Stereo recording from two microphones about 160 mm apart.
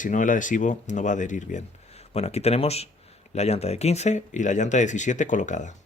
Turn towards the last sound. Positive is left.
turn(degrees=50)  # may be behind; listen again after turning